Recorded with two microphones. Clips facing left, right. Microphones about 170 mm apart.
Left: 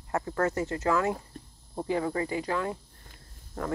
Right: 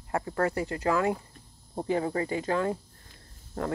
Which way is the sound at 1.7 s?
30° right (ahead or behind).